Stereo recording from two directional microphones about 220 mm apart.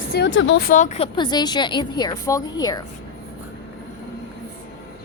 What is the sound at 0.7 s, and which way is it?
A woman's voice, 35° left (ahead or behind).